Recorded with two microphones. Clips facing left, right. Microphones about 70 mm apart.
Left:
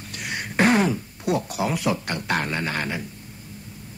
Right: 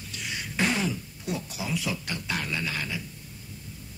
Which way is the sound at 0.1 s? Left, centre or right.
Left.